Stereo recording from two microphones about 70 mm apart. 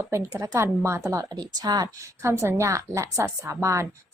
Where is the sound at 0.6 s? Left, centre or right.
Right.